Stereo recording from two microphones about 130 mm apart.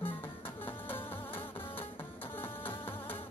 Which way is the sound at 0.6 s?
15° left (ahead or behind).